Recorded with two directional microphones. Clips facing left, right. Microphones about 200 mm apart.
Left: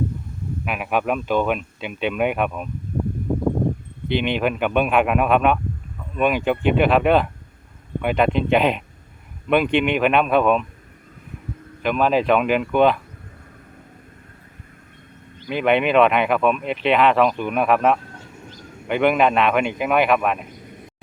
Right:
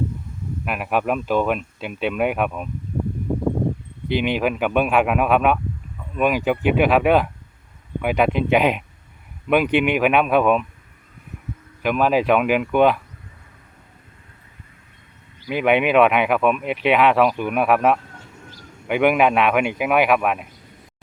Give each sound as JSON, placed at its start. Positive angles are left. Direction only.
{"t": 0.6, "sound": "speech", "side_deg": 0}
{"t": 4.1, "sound": "speech", "side_deg": -5}
{"t": 11.8, "sound": "speech", "side_deg": -10}
{"t": 15.4, "sound": "speech", "side_deg": -10}